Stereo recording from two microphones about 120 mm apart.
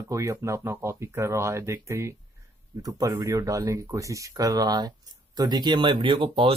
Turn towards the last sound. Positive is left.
turn(degrees=-45)  # may be behind; listen again after turning